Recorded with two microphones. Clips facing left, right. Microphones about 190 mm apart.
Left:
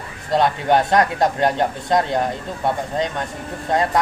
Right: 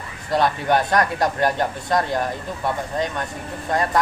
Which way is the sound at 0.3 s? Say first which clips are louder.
Left 2 dB; 20° left (ahead or behind).